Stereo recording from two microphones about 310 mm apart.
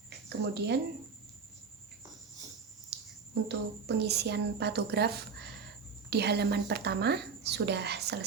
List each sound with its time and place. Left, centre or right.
0.1 s speech: right
2.9 s a sound: right
3.5 s speech: right